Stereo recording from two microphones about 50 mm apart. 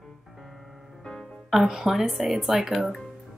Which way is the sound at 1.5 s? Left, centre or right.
Centre.